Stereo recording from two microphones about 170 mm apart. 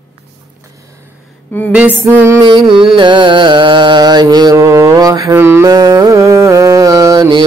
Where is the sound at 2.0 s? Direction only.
15° right (ahead or behind).